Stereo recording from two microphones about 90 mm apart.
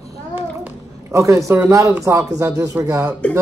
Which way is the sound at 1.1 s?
35° right (ahead or behind).